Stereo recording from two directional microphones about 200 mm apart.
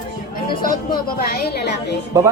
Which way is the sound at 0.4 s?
45° left (ahead or behind).